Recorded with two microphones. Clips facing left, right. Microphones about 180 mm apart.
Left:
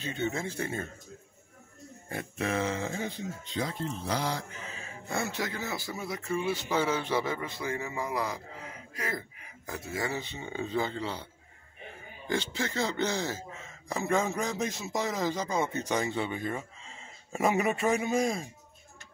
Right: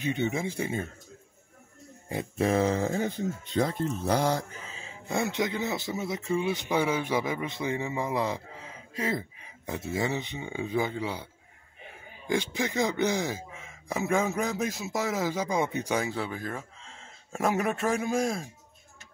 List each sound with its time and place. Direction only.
0.0 s speech: 15° right (ahead or behind)
2.3 s a sound: 35° right (ahead or behind)
3.5 s speech: 45° right (ahead or behind)
5.0 s speech: 20° right (ahead or behind)
12.3 s speech: 15° right (ahead or behind)